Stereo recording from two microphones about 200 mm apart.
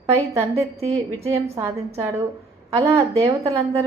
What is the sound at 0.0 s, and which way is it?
Speech, 15° right (ahead or behind).